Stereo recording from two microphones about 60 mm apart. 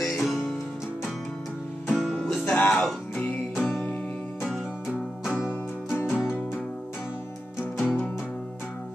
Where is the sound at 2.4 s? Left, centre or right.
Left.